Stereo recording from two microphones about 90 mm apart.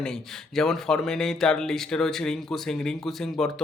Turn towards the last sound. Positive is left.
turn(degrees=5)  # may be behind; listen again after turning